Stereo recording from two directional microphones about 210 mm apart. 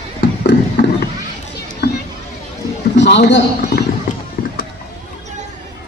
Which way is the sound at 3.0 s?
55° left (ahead or behind).